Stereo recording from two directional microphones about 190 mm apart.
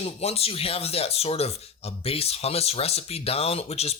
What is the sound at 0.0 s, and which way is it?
Speech, 30° left (ahead or behind).